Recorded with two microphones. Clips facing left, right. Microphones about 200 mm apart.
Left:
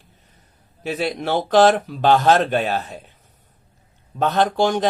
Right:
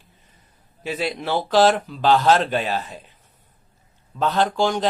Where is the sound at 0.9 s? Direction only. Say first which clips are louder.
Left 2 dB; 50° left (ahead or behind).